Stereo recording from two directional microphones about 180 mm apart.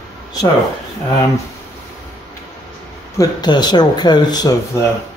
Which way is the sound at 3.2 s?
25° left (ahead or behind).